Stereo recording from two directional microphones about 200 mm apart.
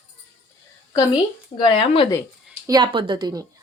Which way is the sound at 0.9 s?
20° left (ahead or behind).